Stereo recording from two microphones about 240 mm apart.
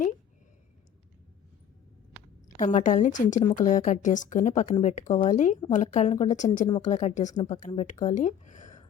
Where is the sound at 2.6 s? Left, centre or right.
Left.